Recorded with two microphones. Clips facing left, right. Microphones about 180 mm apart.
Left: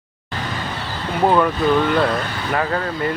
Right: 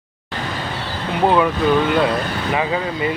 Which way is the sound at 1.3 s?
5° right (ahead or behind).